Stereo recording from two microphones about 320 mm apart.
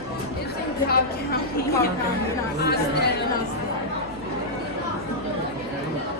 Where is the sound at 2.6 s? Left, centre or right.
Left.